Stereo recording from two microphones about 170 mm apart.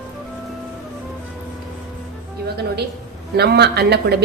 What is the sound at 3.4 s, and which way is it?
Speech, 75° right (ahead or behind).